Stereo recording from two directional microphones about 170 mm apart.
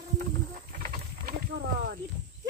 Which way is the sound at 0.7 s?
55° right (ahead or behind).